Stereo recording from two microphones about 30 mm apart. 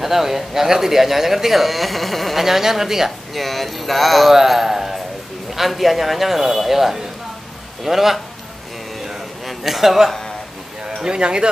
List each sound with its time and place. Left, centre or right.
0.0 s speech: centre
2.4 s speech: centre
3.3 s a man's voice: centre
4.5 s a sound: centre
5.5 s a man's voice: centre
9.0 s a sound: centre
11.1 s speech: right